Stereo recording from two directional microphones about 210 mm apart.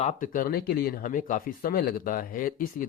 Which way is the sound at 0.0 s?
35° left (ahead or behind).